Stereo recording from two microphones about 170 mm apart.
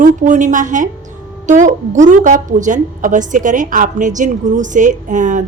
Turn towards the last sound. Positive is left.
turn(degrees=-45)  # may be behind; listen again after turning